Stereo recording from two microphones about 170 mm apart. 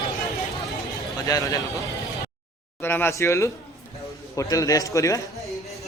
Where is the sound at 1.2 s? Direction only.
20° left (ahead or behind).